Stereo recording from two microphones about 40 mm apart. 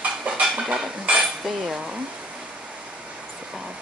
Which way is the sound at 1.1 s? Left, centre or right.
Centre.